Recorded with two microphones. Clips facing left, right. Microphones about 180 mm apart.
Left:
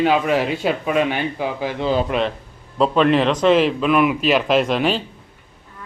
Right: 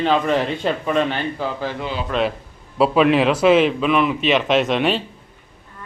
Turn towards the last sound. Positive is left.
turn(degrees=0)  # may be behind; listen again after turning